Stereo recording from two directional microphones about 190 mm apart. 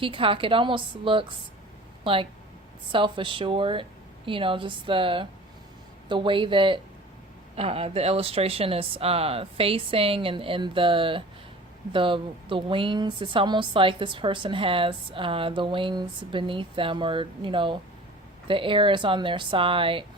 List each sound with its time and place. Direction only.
0.0 s speech: 30° right (ahead or behind)
2.9 s speech: 25° right (ahead or behind)